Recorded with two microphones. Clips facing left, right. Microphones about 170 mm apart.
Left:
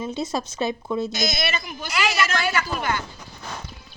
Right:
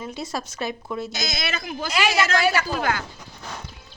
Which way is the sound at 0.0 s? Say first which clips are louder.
Left 4 dB; 20° left (ahead or behind).